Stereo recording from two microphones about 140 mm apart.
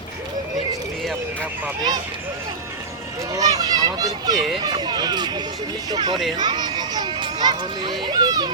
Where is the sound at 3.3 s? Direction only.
25° right (ahead or behind).